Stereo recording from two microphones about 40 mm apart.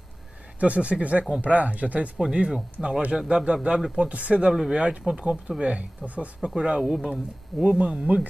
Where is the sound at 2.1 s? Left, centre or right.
Right.